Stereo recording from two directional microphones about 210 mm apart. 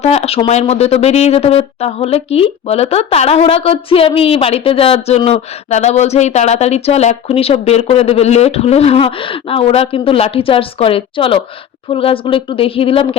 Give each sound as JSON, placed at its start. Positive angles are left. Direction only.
{"t": 0.0, "sound": "speech", "side_deg": 30}